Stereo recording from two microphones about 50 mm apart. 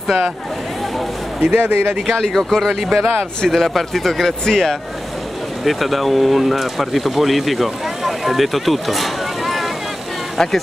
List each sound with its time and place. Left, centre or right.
1.4 s speech: right
2.1 s speech: centre